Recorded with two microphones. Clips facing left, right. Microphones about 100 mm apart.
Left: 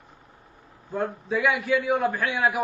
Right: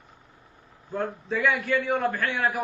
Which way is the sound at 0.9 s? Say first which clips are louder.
Left 2 dB; 10° left (ahead or behind).